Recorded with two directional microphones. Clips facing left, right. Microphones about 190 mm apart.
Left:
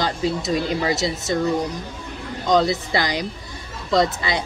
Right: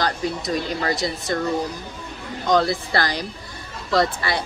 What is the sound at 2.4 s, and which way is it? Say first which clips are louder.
Speech: left 1 dB; 20° left (ahead or behind).